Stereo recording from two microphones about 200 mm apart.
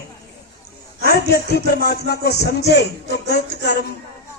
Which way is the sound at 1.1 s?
55° left (ahead or behind).